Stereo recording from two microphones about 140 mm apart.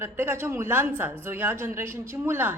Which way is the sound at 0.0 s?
15° right (ahead or behind).